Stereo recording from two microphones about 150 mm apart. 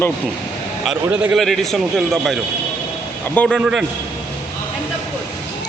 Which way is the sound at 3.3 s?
10° left (ahead or behind).